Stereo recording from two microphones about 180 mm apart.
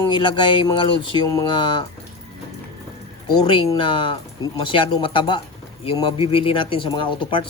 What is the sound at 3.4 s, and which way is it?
Speech, 30° left (ahead or behind).